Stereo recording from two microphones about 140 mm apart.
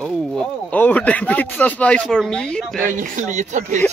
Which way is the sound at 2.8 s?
70° right (ahead or behind).